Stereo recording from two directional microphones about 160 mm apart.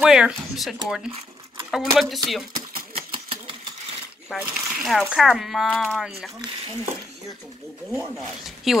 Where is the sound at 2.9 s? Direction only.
35° right (ahead or behind).